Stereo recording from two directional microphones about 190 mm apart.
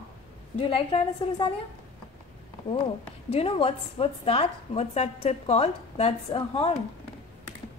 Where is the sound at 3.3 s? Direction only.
30° left (ahead or behind).